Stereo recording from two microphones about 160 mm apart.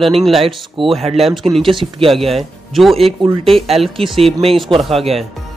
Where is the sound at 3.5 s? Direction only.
40° right (ahead or behind).